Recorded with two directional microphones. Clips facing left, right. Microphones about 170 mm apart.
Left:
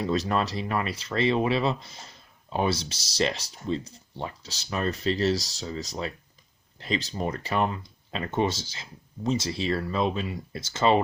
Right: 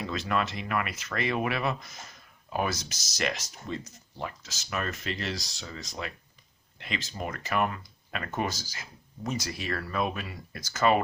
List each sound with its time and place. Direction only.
0.0 s speech: 35° left (ahead or behind)